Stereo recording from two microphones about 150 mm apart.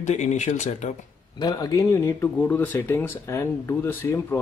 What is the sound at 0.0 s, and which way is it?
Speech, 50° left (ahead or behind).